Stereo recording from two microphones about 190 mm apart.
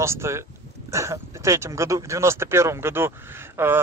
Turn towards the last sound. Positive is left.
turn(degrees=-10)  # may be behind; listen again after turning